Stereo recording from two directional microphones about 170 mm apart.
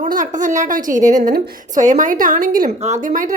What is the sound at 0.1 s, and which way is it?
A woman's voice, 50° right (ahead or behind).